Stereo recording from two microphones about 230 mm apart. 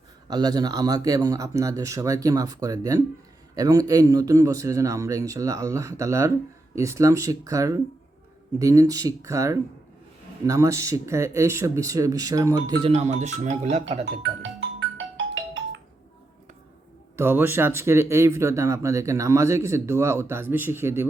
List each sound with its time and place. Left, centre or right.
0.3 s speech: centre
14.0 s music: right
17.2 s speech: centre